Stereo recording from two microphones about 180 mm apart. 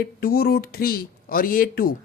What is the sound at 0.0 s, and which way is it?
Speech, 55° left (ahead or behind).